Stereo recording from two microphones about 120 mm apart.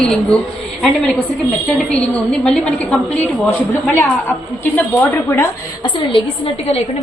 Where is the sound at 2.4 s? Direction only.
5° left (ahead or behind).